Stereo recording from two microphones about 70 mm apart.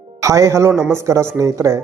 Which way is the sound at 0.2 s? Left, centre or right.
Right.